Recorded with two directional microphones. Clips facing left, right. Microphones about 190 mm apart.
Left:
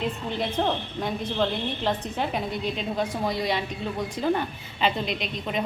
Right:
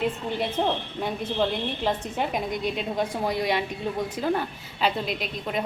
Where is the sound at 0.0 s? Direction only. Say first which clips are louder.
Right 2 dB; 10° right (ahead or behind).